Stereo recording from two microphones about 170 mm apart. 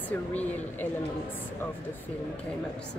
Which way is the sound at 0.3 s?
10° left (ahead or behind).